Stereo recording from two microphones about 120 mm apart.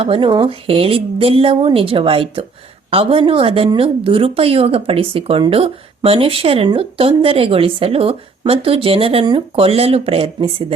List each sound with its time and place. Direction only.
0.0 s speech: 45° right (ahead or behind)